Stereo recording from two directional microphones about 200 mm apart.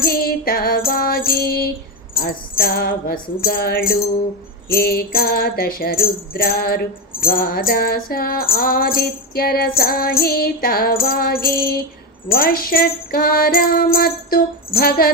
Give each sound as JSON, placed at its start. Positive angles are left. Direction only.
{"t": 0.0, "sound": "music", "side_deg": 50}